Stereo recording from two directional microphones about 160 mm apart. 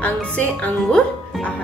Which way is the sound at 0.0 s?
10° left (ahead or behind).